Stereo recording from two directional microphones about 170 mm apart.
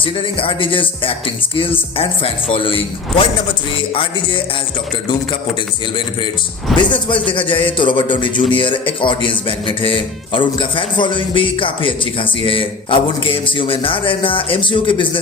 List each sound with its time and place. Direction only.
0.0 s a man's voice: 30° left (ahead or behind)
6.9 s a man's voice: 30° left (ahead or behind)